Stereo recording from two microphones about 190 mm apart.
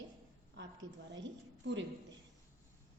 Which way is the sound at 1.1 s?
70° right (ahead or behind).